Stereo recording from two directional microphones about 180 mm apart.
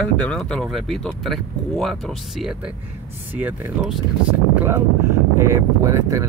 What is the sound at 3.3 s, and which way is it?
Speech, 5° right (ahead or behind).